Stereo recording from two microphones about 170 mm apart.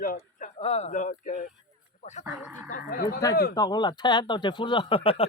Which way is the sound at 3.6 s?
25° left (ahead or behind).